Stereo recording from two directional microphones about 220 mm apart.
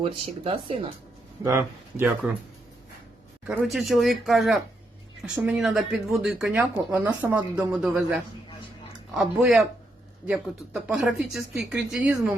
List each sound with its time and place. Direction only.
0.0 s speech: 25° right (ahead or behind)
1.5 s speech: 10° right (ahead or behind)
3.4 s speech: 5° right (ahead or behind)